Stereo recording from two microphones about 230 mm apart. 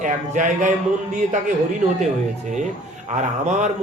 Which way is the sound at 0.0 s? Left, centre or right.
Right.